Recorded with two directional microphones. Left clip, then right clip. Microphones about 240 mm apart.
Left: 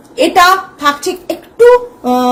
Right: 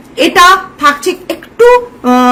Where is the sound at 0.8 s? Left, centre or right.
Centre.